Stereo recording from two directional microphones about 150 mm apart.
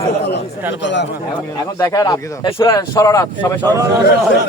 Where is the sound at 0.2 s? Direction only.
90° left.